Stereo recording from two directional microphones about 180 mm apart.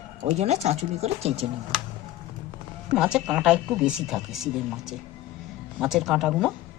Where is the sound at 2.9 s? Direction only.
5° right (ahead or behind).